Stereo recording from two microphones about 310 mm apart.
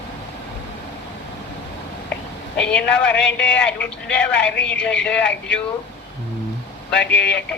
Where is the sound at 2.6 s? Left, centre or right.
Centre.